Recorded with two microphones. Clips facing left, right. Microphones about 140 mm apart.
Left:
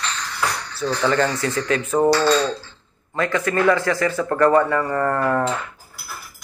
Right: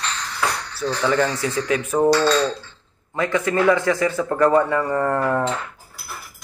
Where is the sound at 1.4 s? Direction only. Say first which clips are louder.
Even; 10° right (ahead or behind).